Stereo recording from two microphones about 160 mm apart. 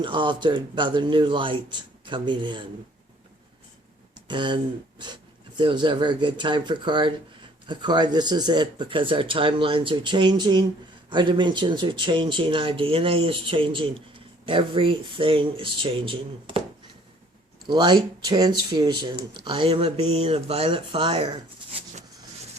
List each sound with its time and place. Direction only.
0.0 s speech: 30° right (ahead or behind)
4.3 s speech: 30° right (ahead or behind)
17.7 s speech: 25° right (ahead or behind)